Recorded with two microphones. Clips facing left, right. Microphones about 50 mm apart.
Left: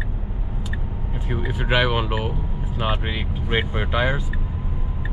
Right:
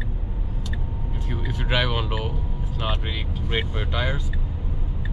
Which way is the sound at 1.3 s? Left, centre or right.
Centre.